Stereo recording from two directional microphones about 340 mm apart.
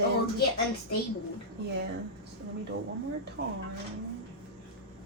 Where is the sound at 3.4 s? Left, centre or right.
Right.